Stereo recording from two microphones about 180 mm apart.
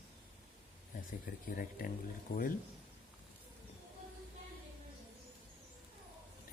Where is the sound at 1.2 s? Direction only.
50° left (ahead or behind).